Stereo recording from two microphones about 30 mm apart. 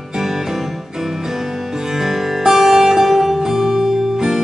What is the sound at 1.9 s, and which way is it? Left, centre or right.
Music, centre.